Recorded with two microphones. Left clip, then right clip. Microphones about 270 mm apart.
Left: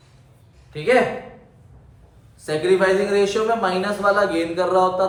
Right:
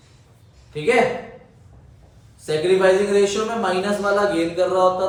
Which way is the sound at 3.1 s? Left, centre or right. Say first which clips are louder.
Even; centre.